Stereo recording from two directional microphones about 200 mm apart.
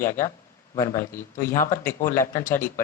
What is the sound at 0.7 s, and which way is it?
Speech, 15° left (ahead or behind).